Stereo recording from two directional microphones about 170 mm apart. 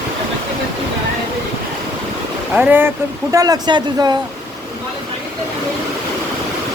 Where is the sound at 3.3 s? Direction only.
20° right (ahead or behind).